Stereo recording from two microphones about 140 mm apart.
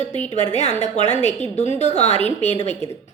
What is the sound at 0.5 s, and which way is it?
A woman's voice, 55° left (ahead or behind).